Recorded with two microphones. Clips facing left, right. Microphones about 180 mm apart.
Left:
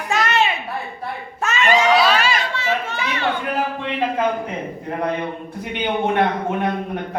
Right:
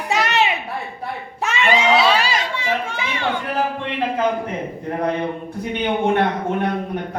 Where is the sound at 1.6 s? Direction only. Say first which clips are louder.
Left 1 dB; 20° right (ahead or behind).